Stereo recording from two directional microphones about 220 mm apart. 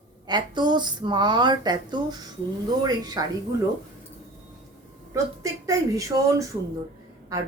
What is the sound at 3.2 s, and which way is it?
Speech, 15° right (ahead or behind).